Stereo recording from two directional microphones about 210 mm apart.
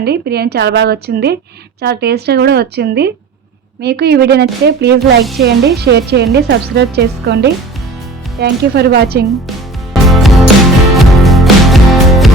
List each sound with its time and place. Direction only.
0.0 s a woman's voice: 50° right (ahead or behind)
4.9 s speech: centre (ahead or behind)
5.4 s a woman's voice: 50° right (ahead or behind)
8.4 s a woman's voice: 50° right (ahead or behind)
9.9 s music: centre (ahead or behind)